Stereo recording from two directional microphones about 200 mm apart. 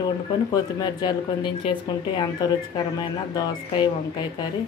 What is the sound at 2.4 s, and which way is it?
Speech, 20° left (ahead or behind).